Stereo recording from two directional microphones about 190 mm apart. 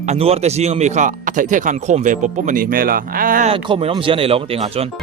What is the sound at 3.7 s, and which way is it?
Speech, 30° right (ahead or behind).